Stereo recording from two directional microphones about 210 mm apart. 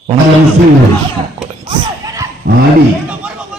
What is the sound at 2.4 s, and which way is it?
Speech, 45° right (ahead or behind).